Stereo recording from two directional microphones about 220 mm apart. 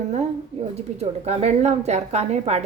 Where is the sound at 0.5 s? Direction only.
30° right (ahead or behind).